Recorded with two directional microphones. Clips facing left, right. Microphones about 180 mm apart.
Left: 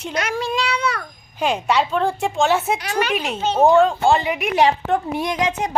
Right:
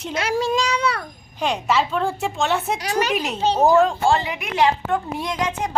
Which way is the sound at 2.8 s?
40° right (ahead or behind).